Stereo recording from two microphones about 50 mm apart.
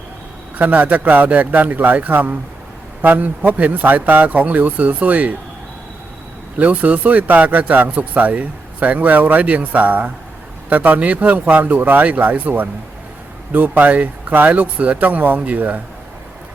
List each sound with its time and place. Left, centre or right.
0.5 s speech: right
6.6 s speech: right